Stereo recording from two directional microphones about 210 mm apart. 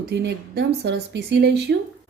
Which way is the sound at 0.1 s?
55° right (ahead or behind).